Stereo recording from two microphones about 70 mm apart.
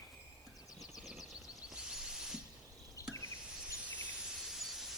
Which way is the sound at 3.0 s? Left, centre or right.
Left.